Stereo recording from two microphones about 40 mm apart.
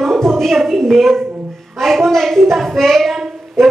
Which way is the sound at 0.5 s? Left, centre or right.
Centre.